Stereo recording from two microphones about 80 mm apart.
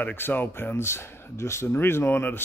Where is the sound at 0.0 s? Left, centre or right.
Left.